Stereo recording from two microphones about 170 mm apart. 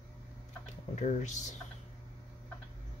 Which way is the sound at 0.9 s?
45° left (ahead or behind).